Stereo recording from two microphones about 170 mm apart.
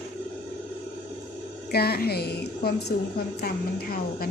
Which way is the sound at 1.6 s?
65° left (ahead or behind).